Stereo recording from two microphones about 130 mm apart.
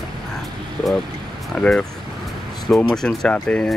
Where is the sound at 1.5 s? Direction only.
5° left (ahead or behind).